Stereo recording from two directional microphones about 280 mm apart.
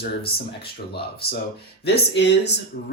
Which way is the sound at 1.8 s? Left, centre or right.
Left.